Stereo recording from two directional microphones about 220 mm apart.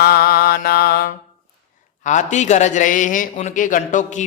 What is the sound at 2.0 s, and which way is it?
A man's voice, 35° left (ahead or behind).